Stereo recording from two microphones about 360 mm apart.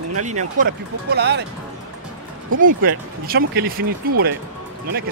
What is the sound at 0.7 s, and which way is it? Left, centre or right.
Speech, right.